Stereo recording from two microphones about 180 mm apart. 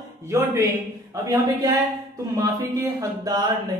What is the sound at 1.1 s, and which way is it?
Speech, 20° right (ahead or behind).